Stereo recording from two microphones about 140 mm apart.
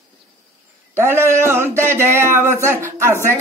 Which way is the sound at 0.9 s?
20° right (ahead or behind).